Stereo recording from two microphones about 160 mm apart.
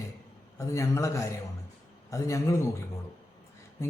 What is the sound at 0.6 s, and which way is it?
A man's voice, 20° left (ahead or behind).